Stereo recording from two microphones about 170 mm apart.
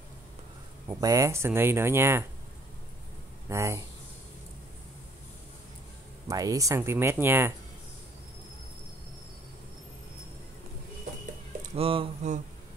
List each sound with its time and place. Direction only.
0.8 s speech: 20° right (ahead or behind)
3.4 s speech: 15° right (ahead or behind)
6.2 s speech: 20° right (ahead or behind)
11.7 s speech: 35° right (ahead or behind)